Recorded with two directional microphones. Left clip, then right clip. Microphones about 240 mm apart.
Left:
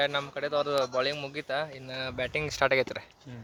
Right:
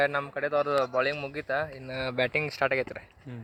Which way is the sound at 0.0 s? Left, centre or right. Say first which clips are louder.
Right 2 dB; right.